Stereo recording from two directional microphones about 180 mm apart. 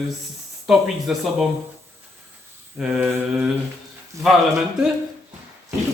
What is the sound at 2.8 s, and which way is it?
Speech, 5° right (ahead or behind).